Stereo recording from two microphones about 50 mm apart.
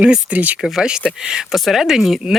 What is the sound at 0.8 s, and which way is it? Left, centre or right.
Speech, centre.